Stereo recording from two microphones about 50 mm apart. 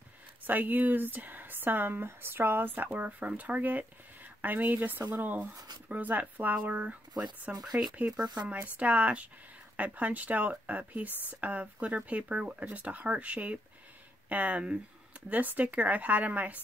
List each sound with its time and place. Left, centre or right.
0.5 s speech: right
7.7 s speech: right